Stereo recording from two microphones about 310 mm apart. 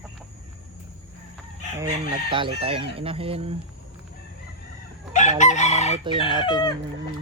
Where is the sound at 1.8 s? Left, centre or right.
Centre.